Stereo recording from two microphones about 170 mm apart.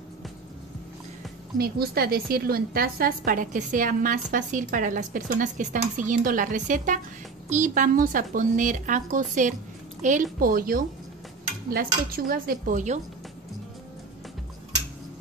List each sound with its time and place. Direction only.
1.6 s a woman's voice: 65° right (ahead or behind); by 10.2 s 45° right (ahead or behind)
10.4 s speech: 55° right (ahead or behind)